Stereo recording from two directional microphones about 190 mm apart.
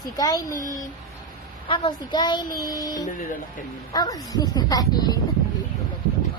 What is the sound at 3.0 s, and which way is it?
Speech, 45° left (ahead or behind).